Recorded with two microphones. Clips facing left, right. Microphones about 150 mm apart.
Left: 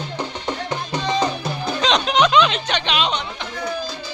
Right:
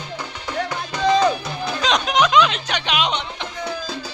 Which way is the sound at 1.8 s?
10° right (ahead or behind).